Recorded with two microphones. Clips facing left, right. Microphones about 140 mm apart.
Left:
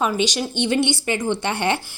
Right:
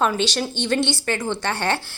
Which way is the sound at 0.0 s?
10° left (ahead or behind).